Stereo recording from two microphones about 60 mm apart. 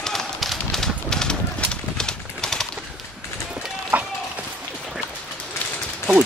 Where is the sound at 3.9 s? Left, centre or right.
Right.